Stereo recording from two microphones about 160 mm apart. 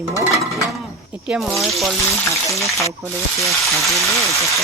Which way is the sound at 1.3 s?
Centre (ahead or behind).